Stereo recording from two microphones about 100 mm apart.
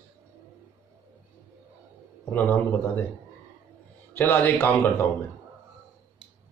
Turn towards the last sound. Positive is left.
turn(degrees=25)  # may be behind; listen again after turning